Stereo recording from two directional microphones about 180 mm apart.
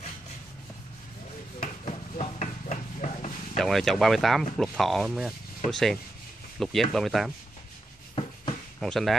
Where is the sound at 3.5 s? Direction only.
Centre (ahead or behind).